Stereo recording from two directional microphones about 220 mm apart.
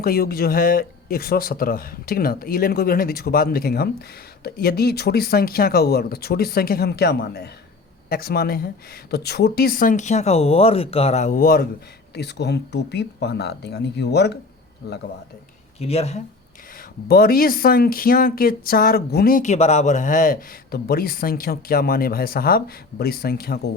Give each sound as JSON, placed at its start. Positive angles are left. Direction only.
{"t": 0.0, "sound": "speech", "side_deg": 40}
{"t": 15.8, "sound": "speech", "side_deg": 30}
{"t": 17.1, "sound": "speech", "side_deg": 40}